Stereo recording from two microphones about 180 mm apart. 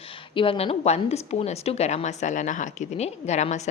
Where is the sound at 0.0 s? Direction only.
30° left (ahead or behind).